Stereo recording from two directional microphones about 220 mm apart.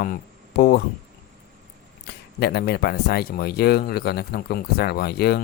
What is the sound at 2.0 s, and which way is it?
Speech, 45° left (ahead or behind).